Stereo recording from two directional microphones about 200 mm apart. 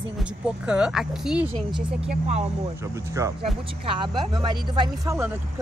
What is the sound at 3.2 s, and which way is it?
Speech, 15° right (ahead or behind).